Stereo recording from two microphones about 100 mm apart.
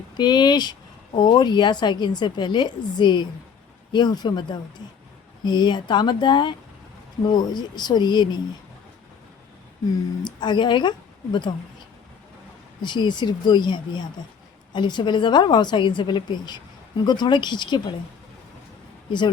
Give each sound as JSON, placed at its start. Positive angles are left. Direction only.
{"t": 0.2, "sound": "speech", "side_deg": 45}
{"t": 10.2, "sound": "speech", "side_deg": 50}
{"t": 12.8, "sound": "speech", "side_deg": 50}